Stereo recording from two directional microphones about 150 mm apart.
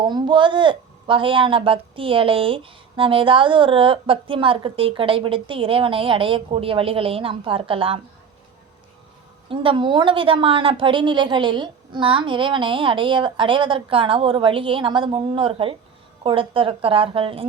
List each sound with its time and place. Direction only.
0.0 s speech: 30° right (ahead or behind)
9.5 s speech: 35° right (ahead or behind)